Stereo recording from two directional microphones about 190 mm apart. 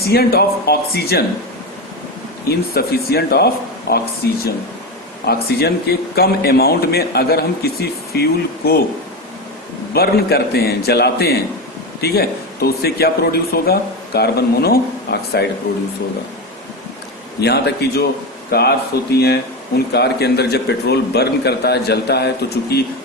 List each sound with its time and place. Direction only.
0.0 s speech: 55° left (ahead or behind)
2.5 s speech: 55° left (ahead or behind)
5.2 s speech: 55° left (ahead or behind)
9.9 s speech: 55° left (ahead or behind)
17.4 s speech: 60° left (ahead or behind)